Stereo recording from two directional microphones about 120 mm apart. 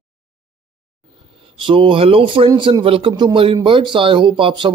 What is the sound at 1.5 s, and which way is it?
A man's voice, 45° right (ahead or behind).